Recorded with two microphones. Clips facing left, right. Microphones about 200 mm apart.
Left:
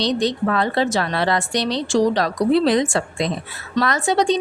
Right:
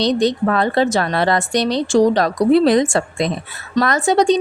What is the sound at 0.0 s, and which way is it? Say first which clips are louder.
A woman's voice: right 4 dB; 45° right (ahead or behind).